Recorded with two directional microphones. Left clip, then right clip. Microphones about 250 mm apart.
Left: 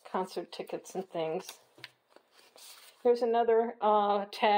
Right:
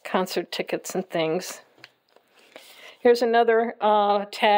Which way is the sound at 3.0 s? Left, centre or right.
Right.